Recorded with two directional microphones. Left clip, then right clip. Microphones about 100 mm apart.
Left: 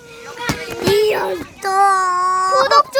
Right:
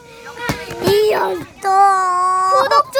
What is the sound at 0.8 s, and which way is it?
Fowl, 45° right (ahead or behind).